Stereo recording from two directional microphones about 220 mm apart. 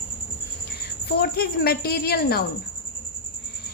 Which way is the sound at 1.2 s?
45° left (ahead or behind).